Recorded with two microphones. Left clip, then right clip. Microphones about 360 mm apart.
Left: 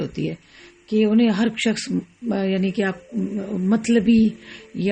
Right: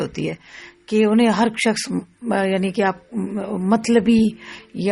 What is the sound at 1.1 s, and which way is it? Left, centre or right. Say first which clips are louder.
A woman's voice: right 3 dB; centre.